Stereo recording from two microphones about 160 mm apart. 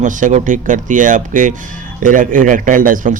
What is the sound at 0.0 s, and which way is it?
Speech, 50° right (ahead or behind).